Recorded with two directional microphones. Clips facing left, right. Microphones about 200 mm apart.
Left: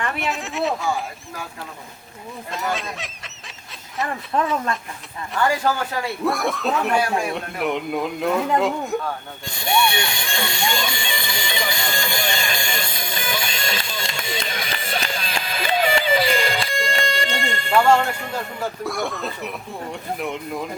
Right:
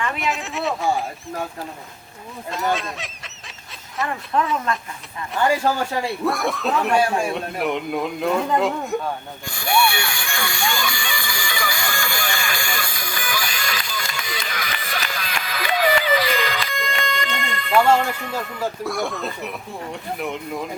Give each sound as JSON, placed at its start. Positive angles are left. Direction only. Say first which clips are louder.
{"t": 0.2, "sound": "a man's voice", "louder": "left 1 dB", "side_deg": 0}
{"t": 2.5, "sound": "goose", "louder": "right 3 dB", "side_deg": 0}
{"t": 5.4, "sound": "speech", "louder": "right 1 dB", "side_deg": -25}
{"t": 6.2, "sound": "a man's voice", "louder": "left 2 dB", "side_deg": 0}
{"t": 9.5, "sound": "music", "louder": "even", "side_deg": 20}
{"t": 17.7, "sound": "a man's voice", "louder": "even", "side_deg": 0}